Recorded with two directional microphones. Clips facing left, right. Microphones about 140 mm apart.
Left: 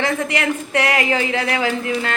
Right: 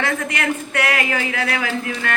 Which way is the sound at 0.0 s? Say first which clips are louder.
Left 2 dB; 25° left (ahead or behind).